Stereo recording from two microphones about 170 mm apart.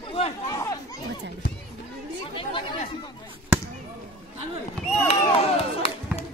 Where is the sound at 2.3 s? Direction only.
30° left (ahead or behind).